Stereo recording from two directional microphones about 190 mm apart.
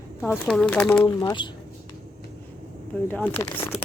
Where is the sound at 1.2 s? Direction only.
25° left (ahead or behind).